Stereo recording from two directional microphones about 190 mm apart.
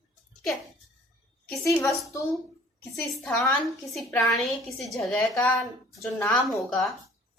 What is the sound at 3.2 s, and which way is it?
A woman's voice, 5° left (ahead or behind).